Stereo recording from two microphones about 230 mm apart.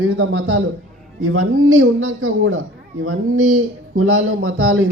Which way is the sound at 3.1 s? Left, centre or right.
Right.